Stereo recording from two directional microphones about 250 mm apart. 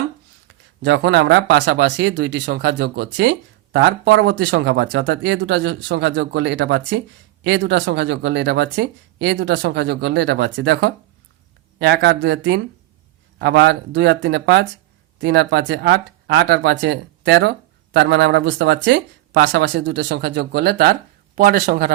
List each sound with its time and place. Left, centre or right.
0.4 s speech: right